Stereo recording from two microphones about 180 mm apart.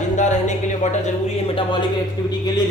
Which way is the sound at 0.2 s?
40° left (ahead or behind).